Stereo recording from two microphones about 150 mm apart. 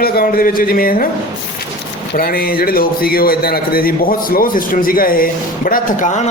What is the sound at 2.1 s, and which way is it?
A man's voice, 75° left (ahead or behind).